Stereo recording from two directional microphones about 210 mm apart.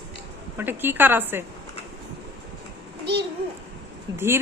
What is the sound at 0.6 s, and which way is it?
Speech, 10° right (ahead or behind).